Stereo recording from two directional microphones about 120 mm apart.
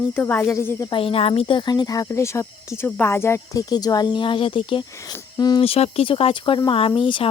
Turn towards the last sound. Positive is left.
turn(degrees=45)  # may be behind; listen again after turning